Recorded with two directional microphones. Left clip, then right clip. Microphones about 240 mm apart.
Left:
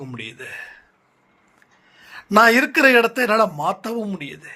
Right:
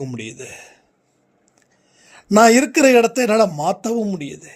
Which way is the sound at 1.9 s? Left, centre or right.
Right.